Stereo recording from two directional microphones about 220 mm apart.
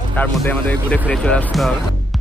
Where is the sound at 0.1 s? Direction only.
5° left (ahead or behind).